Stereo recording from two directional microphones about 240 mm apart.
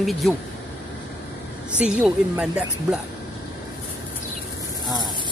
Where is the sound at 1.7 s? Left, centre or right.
Centre.